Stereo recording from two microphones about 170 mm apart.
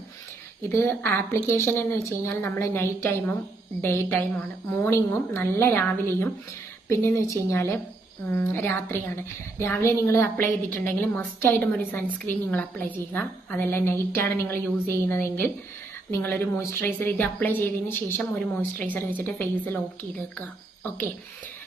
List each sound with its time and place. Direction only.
0.8 s a woman's voice: 15° left (ahead or behind)